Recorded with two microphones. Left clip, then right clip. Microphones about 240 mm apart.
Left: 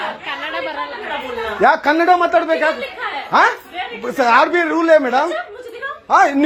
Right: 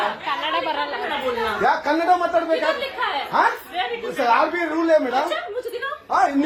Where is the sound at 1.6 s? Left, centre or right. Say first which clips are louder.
Left 8 dB; left.